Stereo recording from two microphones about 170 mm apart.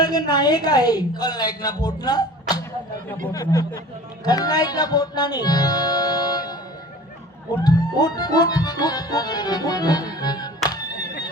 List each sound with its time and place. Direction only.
0.0 s a woman's voice: 25° left (ahead or behind)
7.6 s speech: 25° left (ahead or behind)